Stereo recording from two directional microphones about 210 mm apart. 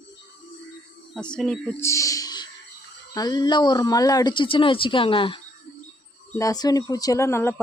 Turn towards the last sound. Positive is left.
turn(degrees=15)  # may be behind; listen again after turning